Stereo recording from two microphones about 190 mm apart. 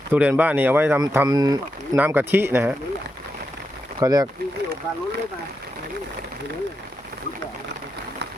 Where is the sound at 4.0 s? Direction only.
20° right (ahead or behind).